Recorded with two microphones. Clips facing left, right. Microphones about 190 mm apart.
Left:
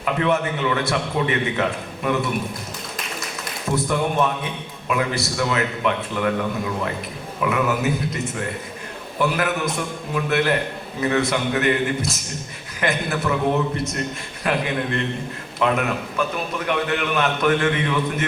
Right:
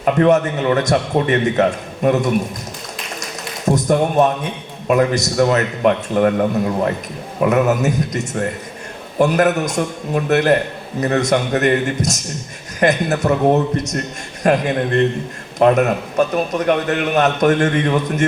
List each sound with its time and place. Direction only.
0.0 s a man's voice: 40° right (ahead or behind)
3.7 s a man's voice: 40° right (ahead or behind)
7.3 s a man's voice: 40° right (ahead or behind)